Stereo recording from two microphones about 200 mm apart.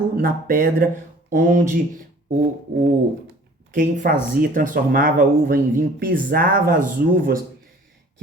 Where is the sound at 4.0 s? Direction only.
45° right (ahead or behind).